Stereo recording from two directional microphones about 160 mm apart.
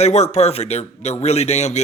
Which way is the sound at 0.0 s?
45° left (ahead or behind).